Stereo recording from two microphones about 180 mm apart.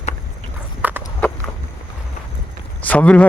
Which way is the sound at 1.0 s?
10° left (ahead or behind).